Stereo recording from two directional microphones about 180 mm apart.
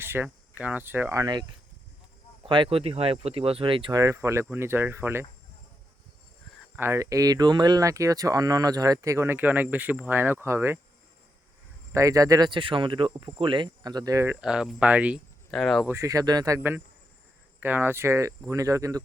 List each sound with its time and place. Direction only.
0.0 s speech: 10° right (ahead or behind)
6.7 s speech: 15° right (ahead or behind)
11.9 s speech: 20° right (ahead or behind)
14.4 s speech: 5° right (ahead or behind)
15.9 s speech: 20° right (ahead or behind)